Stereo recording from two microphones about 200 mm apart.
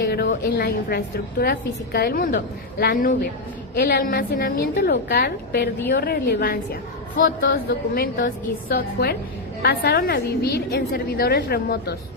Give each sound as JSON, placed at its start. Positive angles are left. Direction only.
{"t": 0.1, "sound": "a woman's voice", "side_deg": 55}